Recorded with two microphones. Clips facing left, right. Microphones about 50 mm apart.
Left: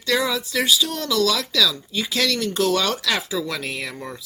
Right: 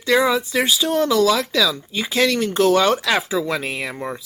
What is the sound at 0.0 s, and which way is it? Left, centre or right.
Speech, right.